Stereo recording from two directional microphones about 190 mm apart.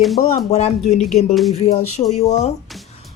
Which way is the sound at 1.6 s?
35° left (ahead or behind).